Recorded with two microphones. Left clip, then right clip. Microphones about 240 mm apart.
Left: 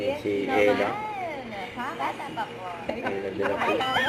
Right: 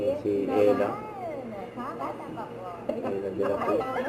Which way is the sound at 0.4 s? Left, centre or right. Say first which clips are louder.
Left 1 dB; centre.